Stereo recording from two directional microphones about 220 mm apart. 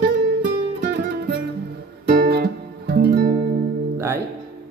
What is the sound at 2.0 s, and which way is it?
Guitar, 45° right (ahead or behind).